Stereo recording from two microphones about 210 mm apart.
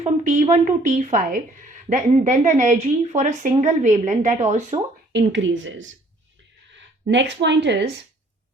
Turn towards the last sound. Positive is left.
turn(degrees=-55)  # may be behind; listen again after turning